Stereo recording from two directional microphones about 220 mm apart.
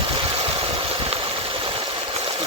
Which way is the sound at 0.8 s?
25° right (ahead or behind).